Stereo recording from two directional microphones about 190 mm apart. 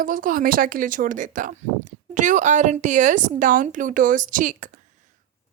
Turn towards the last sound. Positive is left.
turn(degrees=-45)  # may be behind; listen again after turning